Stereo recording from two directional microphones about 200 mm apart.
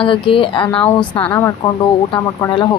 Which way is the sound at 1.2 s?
10° left (ahead or behind).